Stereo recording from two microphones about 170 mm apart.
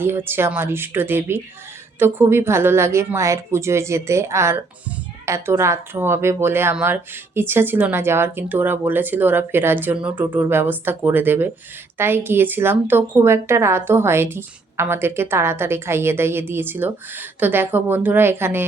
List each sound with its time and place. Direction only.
0.0 s a woman's voice: 15° right (ahead or behind)